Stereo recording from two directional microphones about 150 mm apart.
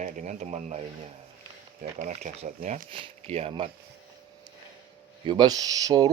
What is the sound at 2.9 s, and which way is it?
Speech, 40° right (ahead or behind).